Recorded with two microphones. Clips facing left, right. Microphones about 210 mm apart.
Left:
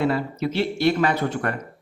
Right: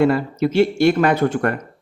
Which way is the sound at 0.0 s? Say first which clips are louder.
Right 6 dB; 50° right (ahead or behind).